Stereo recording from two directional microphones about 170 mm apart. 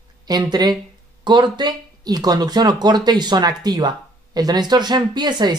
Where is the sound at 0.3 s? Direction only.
25° right (ahead or behind).